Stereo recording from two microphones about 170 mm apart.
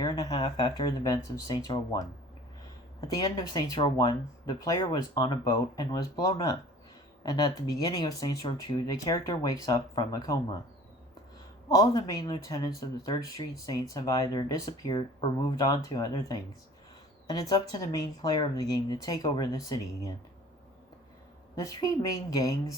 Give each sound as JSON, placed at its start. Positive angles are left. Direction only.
{"t": 0.0, "sound": "speech", "side_deg": 20}
{"t": 3.1, "sound": "speech", "side_deg": 20}
{"t": 11.7, "sound": "speech", "side_deg": 20}
{"t": 21.5, "sound": "speech", "side_deg": 20}